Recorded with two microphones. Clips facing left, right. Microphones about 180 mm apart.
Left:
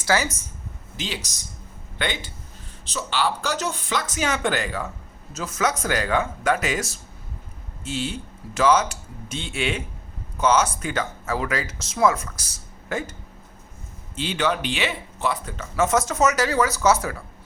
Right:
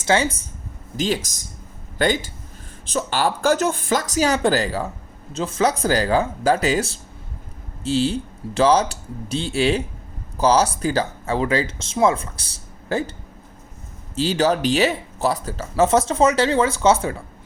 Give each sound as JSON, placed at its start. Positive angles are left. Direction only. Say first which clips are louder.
{"t": 0.0, "sound": "speech", "louder": "right 3 dB", "side_deg": -25}
{"t": 0.9, "sound": "speech", "louder": "right 10 dB", "side_deg": -45}
{"t": 14.2, "sound": "speech", "louder": "right 5 dB", "side_deg": -35}